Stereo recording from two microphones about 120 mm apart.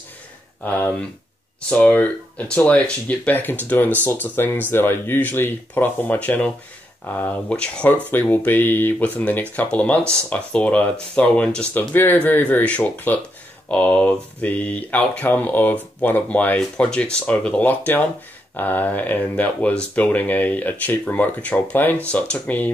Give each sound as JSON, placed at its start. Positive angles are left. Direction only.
{"t": 0.7, "sound": "speech", "side_deg": 15}